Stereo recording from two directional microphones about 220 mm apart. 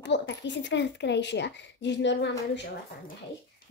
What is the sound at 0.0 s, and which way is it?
Speech, 55° left (ahead or behind).